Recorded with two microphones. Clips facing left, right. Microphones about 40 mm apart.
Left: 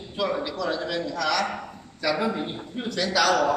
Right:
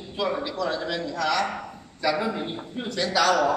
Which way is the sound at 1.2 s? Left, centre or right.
Centre.